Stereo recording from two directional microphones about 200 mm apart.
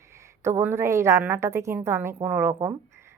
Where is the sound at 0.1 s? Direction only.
15° right (ahead or behind).